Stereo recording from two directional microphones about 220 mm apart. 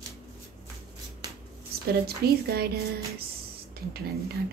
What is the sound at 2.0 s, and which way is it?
Speech, 45° right (ahead or behind).